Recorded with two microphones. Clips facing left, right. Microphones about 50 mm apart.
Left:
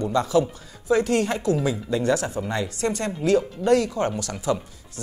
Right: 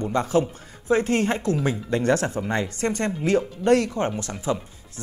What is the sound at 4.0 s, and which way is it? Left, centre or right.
Speech, right.